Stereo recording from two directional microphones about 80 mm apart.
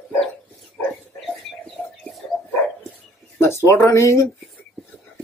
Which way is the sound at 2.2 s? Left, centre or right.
Centre.